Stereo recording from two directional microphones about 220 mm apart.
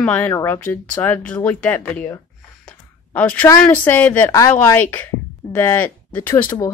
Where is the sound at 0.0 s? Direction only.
5° left (ahead or behind).